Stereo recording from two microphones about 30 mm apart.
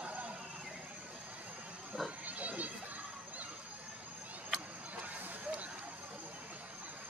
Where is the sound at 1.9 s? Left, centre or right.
Right.